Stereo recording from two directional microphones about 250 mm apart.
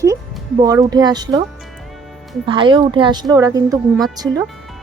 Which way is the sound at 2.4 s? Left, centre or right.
Centre.